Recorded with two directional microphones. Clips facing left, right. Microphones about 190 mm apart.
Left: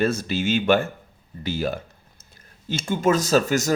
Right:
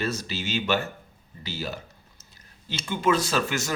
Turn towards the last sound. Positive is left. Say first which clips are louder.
# left 7 dB
turn(degrees=40)  # may be behind; listen again after turning